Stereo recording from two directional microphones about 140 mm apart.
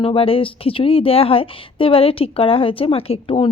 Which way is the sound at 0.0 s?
40° left (ahead or behind).